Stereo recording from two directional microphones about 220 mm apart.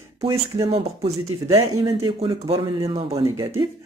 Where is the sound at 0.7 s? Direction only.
25° right (ahead or behind).